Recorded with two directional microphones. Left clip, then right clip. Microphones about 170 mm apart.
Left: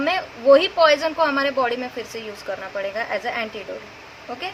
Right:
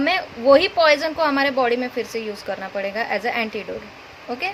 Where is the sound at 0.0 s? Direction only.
30° right (ahead or behind).